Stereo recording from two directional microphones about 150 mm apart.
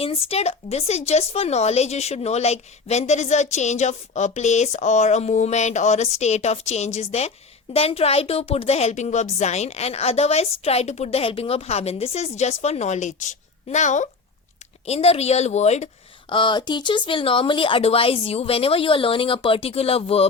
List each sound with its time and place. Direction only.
0.0 s speech: 40° left (ahead or behind)
14.8 s speech: 40° left (ahead or behind)
16.3 s speech: 30° left (ahead or behind)